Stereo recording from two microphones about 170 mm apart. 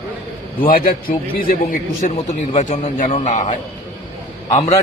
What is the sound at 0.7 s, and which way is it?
A man's voice, 60° left (ahead or behind).